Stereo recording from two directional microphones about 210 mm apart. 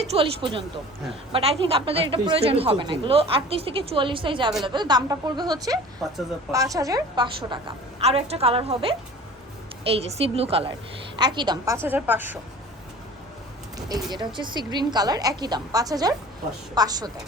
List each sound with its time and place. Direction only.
0.0 s a sound: 30° right (ahead or behind)
1.3 s a woman's voice: 25° right (ahead or behind)
6.0 s speech: centre (ahead or behind)
6.5 s a woman's voice: 15° right (ahead or behind)
13.7 s a woman's voice: 15° right (ahead or behind)